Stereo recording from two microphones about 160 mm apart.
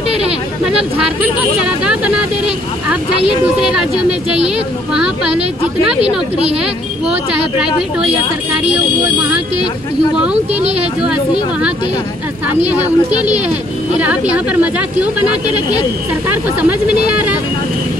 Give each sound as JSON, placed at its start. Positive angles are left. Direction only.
{"t": 1.9, "sound": "speech", "side_deg": -10}
{"t": 4.9, "sound": "speech", "side_deg": -5}
{"t": 6.5, "sound": "speech", "side_deg": -5}
{"t": 10.1, "sound": "speech", "side_deg": -5}
{"t": 12.6, "sound": "speech", "side_deg": -10}
{"t": 16.6, "sound": "speech", "side_deg": -10}